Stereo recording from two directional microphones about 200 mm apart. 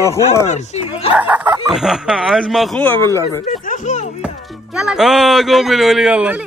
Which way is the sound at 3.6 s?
40° left (ahead or behind).